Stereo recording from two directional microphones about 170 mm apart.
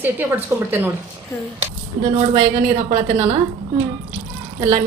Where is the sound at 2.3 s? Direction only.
45° right (ahead or behind).